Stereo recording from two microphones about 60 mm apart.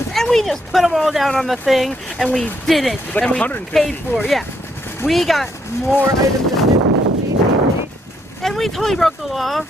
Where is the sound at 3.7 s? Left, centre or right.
Centre.